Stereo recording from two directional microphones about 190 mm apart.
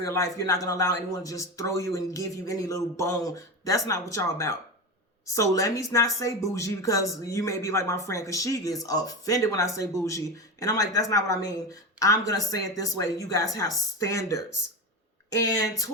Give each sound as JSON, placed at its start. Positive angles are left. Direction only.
{"t": 0.0, "sound": "speech", "side_deg": 15}